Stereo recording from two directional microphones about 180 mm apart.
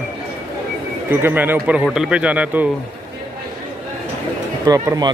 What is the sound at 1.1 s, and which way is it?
Speech, 10° right (ahead or behind).